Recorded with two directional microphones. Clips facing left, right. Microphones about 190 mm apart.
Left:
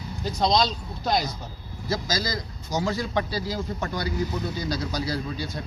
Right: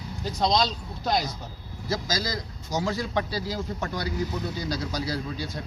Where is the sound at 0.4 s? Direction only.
25° left (ahead or behind).